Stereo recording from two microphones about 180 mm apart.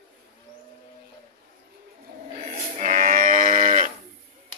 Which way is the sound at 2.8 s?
40° right (ahead or behind).